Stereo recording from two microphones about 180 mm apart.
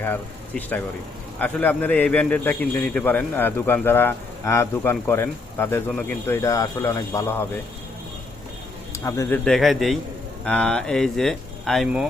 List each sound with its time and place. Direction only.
0.0 s a man's voice: 10° left (ahead or behind)
8.9 s speech: 15° left (ahead or behind)
9.4 s speech: centre (ahead or behind)